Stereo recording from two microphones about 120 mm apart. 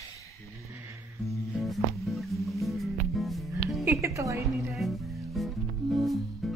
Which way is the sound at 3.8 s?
20° right (ahead or behind).